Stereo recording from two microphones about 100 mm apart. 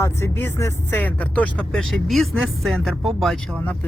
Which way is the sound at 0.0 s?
25° left (ahead or behind).